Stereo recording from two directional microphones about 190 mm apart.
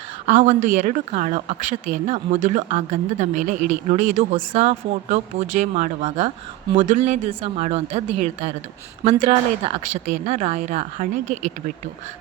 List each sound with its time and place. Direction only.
0.3 s a woman's voice: 40° right (ahead or behind)